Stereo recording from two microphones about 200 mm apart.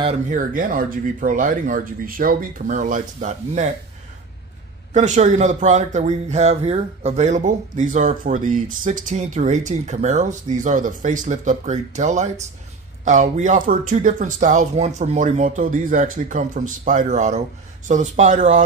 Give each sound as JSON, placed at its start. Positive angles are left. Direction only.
{"t": 0.3, "sound": "speech", "side_deg": -45}
{"t": 4.9, "sound": "speech", "side_deg": -35}